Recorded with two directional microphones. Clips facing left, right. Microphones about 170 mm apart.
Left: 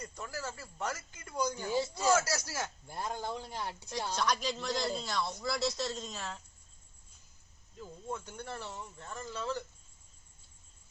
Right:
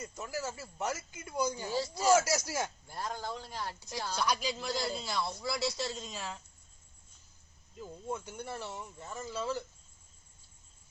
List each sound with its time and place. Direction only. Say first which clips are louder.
0.0 s speech: right 3 dB; 10° right (ahead or behind)
2.8 s a man's voice: left 1 dB; 20° left (ahead or behind)
4.1 s speech: even; 5° right (ahead or behind)
7.8 s speech: right 2 dB; 15° right (ahead or behind)